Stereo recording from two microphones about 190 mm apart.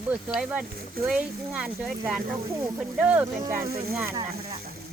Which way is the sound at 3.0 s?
10° right (ahead or behind).